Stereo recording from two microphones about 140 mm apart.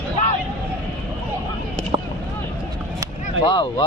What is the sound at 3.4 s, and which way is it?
Speech, 35° left (ahead or behind).